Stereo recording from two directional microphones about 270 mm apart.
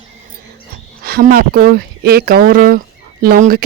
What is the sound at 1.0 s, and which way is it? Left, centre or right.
Speech, right.